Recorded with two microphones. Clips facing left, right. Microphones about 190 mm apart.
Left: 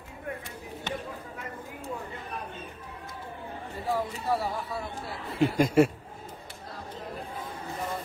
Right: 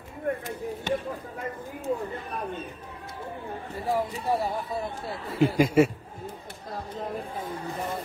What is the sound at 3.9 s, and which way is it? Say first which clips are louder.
Speech: right 2 dB; 15° right (ahead or behind).